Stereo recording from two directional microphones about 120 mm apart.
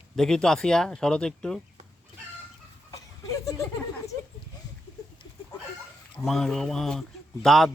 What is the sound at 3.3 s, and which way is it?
Speech, 30° left (ahead or behind).